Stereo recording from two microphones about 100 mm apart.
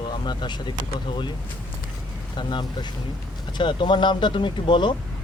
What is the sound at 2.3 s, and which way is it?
Speech, 50° left (ahead or behind).